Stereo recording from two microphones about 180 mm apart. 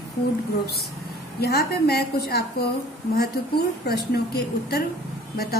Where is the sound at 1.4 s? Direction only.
60° left (ahead or behind).